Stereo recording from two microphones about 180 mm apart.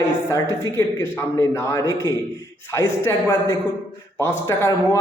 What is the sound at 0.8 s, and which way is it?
A man's voice, 15° left (ahead or behind).